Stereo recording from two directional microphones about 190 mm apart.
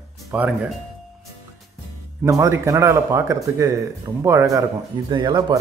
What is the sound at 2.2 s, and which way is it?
Speech, 15° right (ahead or behind).